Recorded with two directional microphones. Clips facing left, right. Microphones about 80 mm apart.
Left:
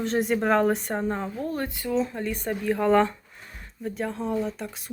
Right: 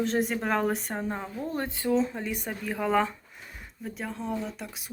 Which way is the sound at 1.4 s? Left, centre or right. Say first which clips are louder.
Left 1 dB; right.